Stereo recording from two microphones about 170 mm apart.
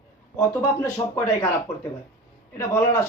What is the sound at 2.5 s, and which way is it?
Speech, 15° left (ahead or behind).